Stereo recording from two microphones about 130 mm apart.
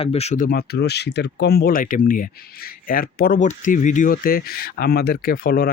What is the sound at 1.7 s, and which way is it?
Speech, 90° left.